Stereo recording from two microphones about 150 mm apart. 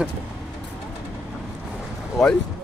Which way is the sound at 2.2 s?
Centre (ahead or behind).